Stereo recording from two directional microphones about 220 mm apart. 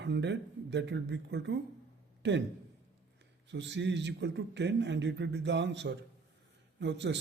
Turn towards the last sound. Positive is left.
turn(degrees=-55)  # may be behind; listen again after turning